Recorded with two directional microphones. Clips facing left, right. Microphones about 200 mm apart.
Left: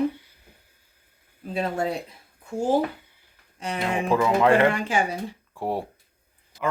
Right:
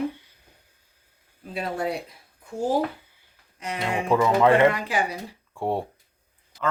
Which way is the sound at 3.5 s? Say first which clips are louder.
Left 2 dB; 30° left (ahead or behind).